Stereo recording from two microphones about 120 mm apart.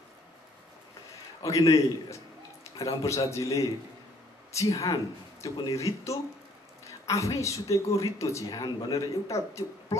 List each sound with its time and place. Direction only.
1.4 s speech: 30° left (ahead or behind)
8.5 s a man's voice: 40° left (ahead or behind)